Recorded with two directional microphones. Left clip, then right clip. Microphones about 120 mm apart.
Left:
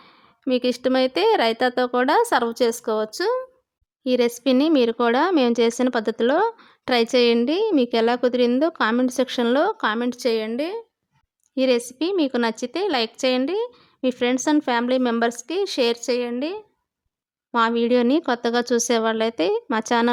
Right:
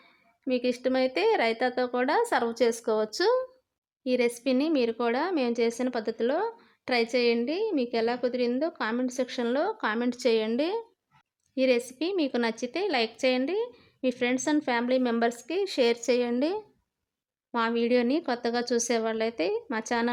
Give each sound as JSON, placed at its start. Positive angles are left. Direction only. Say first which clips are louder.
{"t": 0.0, "sound": "a woman's voice", "louder": "left 7 dB", "side_deg": 35}
{"t": 2.8, "sound": "a woman's voice", "louder": "left 3 dB", "side_deg": 20}
{"t": 4.0, "sound": "a woman's voice", "louder": "left 6 dB", "side_deg": 35}
{"t": 11.5, "sound": "a woman's voice", "louder": "left 5 dB", "side_deg": 30}
{"t": 17.5, "sound": "a woman's voice", "louder": "left 6 dB", "side_deg": 30}